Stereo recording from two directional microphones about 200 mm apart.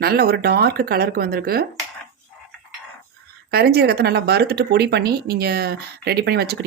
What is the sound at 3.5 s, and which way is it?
Speech, 50° right (ahead or behind).